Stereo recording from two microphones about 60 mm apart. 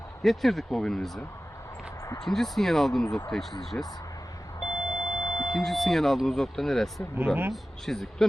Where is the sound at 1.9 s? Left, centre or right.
Left.